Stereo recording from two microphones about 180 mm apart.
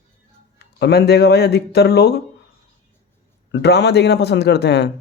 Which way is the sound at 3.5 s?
70° left (ahead or behind).